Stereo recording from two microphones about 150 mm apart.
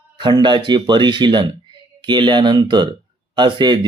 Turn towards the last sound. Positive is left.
turn(degrees=-30)  # may be behind; listen again after turning